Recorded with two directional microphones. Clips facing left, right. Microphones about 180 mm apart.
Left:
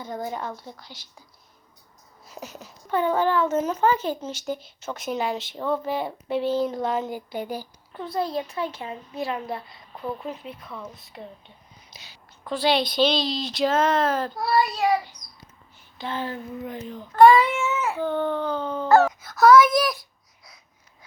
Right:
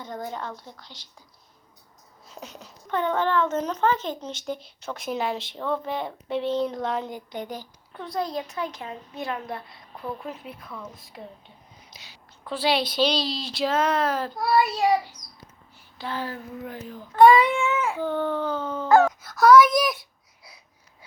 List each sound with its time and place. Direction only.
0.0 s a woman's voice: 10° left (ahead or behind)
2.2 s speech: 5° left (ahead or behind)
16.0 s speech: 5° right (ahead or behind)
16.6 s speech: 20° left (ahead or behind)
16.9 s speech: 5° right (ahead or behind)
18.1 s a woman's voice: 15° left (ahead or behind)
18.5 s a sound: 15° left (ahead or behind)
19.4 s speech: 5° left (ahead or behind)